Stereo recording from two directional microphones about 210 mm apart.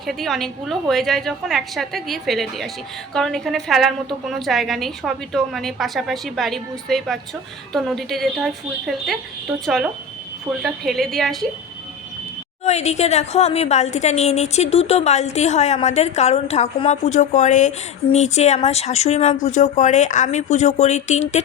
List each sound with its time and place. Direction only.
0.0 s a woman's voice: centre (ahead or behind)
12.6 s a woman's voice: 30° left (ahead or behind)